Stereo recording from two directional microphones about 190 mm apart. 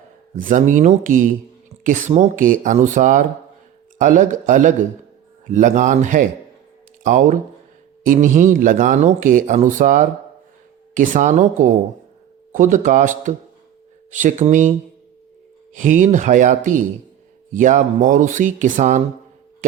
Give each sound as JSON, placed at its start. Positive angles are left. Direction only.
{"t": 0.3, "sound": "speech", "side_deg": -45}
{"t": 15.7, "sound": "speech", "side_deg": -40}